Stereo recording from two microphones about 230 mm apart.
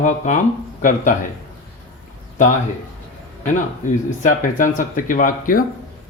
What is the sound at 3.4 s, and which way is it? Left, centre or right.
Speech, left.